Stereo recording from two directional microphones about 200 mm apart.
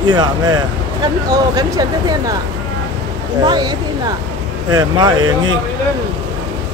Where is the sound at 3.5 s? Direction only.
20° right (ahead or behind).